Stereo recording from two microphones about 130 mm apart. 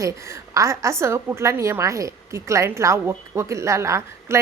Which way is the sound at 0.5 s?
25° right (ahead or behind).